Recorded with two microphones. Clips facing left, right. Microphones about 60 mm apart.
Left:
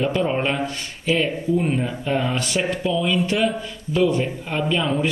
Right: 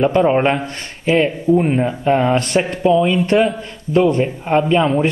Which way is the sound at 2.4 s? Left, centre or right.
Right.